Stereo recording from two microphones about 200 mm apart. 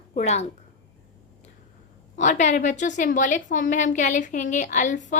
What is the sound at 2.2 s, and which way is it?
A woman's voice, 35° left (ahead or behind).